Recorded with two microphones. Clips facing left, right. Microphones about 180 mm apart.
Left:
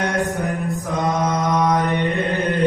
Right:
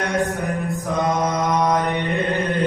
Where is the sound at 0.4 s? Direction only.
Centre (ahead or behind).